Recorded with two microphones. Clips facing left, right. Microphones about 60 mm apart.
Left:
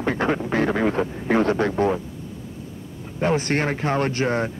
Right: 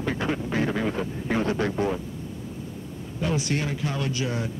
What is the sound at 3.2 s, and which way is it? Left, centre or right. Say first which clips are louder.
Speech: left 6 dB; left.